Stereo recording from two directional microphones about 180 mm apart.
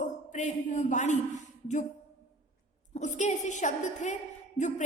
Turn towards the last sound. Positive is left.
turn(degrees=40)  # may be behind; listen again after turning